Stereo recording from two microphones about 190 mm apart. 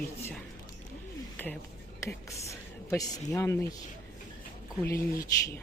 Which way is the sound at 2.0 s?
15° left (ahead or behind).